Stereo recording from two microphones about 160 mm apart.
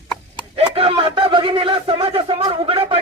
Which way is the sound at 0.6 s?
35° right (ahead or behind).